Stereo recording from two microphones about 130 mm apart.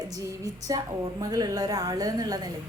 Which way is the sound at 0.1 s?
25° right (ahead or behind).